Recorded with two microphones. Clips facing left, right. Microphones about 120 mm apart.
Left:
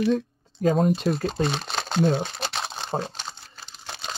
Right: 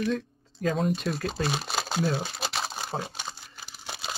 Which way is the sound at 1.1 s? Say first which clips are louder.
Left 4 dB; 5° right (ahead or behind).